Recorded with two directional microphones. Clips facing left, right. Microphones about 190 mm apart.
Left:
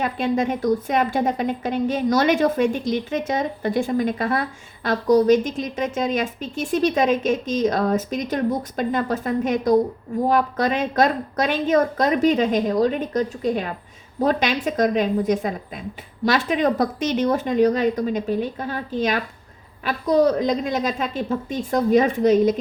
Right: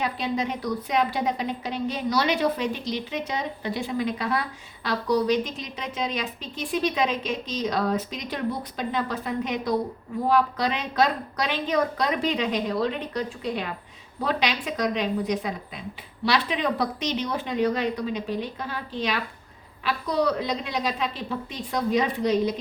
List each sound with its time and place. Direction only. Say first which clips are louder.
0.0 s a woman's voice: left 5 dB; 50° left (ahead or behind)